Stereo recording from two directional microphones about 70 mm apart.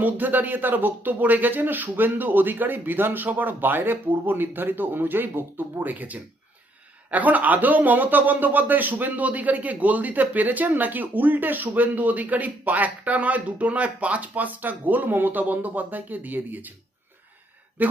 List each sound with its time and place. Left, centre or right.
0.0 s speech: right
17.8 s speech: right